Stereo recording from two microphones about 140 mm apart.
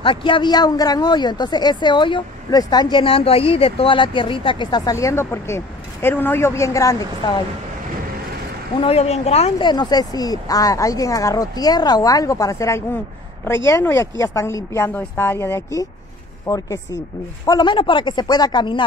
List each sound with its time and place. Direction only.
0.0 s speech: 35° left (ahead or behind)
8.8 s speech: 50° left (ahead or behind)
9.6 s a woman's voice: 30° left (ahead or behind)